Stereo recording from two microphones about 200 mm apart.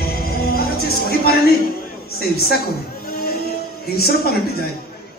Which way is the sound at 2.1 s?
50° left (ahead or behind).